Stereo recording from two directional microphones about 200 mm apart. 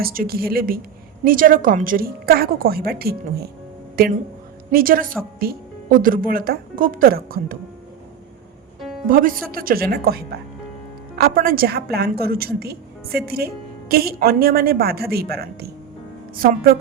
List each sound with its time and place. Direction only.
0.0 s a woman's voice: 45° right (ahead or behind)
4.7 s a woman's voice: 45° right (ahead or behind)
9.0 s a woman's voice: 45° right (ahead or behind)